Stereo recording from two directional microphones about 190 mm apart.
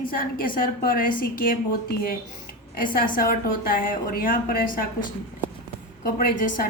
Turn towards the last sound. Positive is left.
turn(degrees=50)  # may be behind; listen again after turning